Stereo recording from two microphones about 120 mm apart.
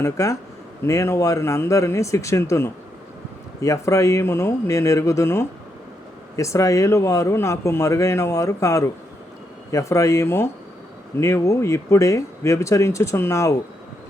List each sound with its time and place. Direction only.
0.0 s a man's voice: 25° left (ahead or behind)